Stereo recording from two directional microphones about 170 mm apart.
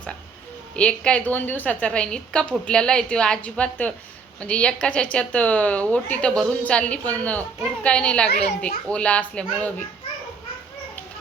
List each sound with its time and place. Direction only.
0.8 s a woman's voice: 5° left (ahead or behind)